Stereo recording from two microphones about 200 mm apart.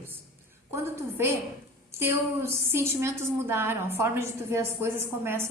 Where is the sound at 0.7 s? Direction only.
10° right (ahead or behind).